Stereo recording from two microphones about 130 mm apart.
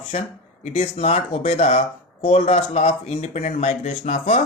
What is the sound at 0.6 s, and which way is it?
Speech, 50° left (ahead or behind).